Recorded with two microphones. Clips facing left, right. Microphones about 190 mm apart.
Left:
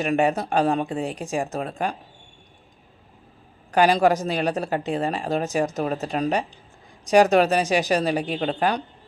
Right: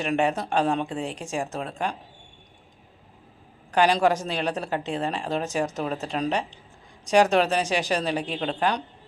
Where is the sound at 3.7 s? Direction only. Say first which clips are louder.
Left 3 dB; 40° left (ahead or behind).